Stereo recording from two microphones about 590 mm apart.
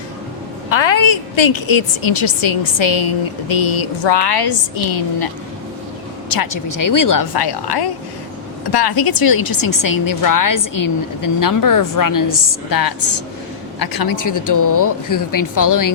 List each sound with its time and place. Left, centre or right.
0.7 s a woman's voice: left
6.2 s a woman's voice: left